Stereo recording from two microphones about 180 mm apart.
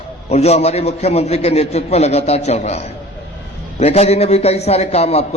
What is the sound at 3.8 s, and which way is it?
A man's voice, 35° left (ahead or behind).